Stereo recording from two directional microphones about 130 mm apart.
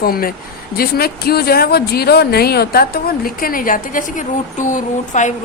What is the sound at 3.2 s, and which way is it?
A woman's voice, 90° left.